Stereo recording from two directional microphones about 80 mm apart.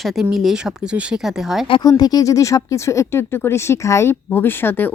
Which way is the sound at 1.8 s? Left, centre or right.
Left.